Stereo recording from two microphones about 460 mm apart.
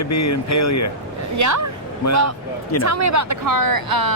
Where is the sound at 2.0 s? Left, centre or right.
Left.